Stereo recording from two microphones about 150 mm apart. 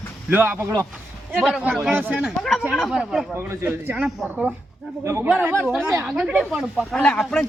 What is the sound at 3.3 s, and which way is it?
Speech, 15° right (ahead or behind).